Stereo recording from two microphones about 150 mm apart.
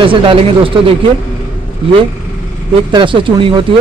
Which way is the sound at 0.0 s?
35° right (ahead or behind).